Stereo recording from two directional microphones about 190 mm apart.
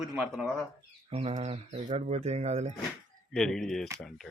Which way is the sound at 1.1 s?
30° right (ahead or behind).